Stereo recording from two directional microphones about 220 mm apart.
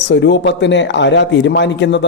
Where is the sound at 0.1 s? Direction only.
55° left (ahead or behind).